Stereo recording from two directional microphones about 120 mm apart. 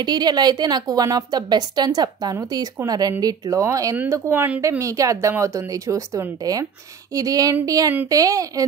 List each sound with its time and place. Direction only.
0.0 s a woman's voice: 35° right (ahead or behind)